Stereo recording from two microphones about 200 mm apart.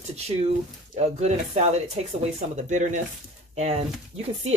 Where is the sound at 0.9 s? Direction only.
30° right (ahead or behind).